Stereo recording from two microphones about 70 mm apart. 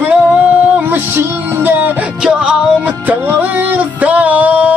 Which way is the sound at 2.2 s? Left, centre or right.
Centre.